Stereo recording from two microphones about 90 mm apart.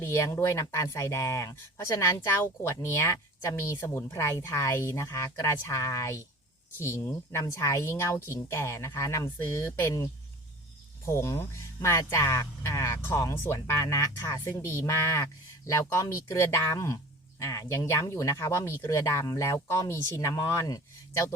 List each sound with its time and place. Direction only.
0.0 s speech: 30° left (ahead or behind)